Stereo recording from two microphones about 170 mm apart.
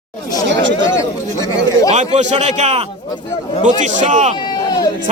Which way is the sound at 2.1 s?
40° right (ahead or behind).